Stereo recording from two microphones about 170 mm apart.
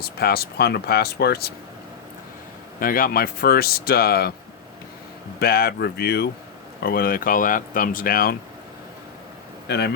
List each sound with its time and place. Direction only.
0.0 s speech: 65° left (ahead or behind)
2.8 s speech: 55° left (ahead or behind)
5.4 s speech: 65° left (ahead or behind)
6.8 s speech: 60° left (ahead or behind)
9.6 s speech: 75° left (ahead or behind)